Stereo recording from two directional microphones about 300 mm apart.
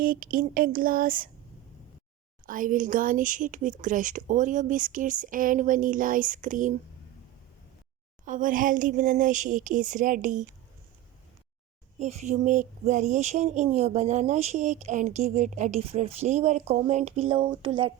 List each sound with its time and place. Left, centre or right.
0.0 s speech: right
2.5 s speech: right
8.2 s speech: right
11.9 s speech: right